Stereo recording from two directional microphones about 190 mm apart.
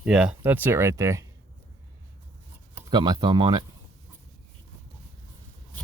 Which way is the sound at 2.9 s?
20° right (ahead or behind).